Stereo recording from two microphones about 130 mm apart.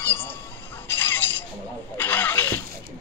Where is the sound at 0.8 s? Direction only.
15° left (ahead or behind).